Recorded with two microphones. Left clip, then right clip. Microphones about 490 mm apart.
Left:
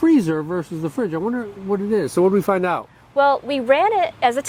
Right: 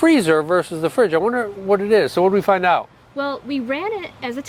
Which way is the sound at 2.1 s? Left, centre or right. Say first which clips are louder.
Right 2 dB; right.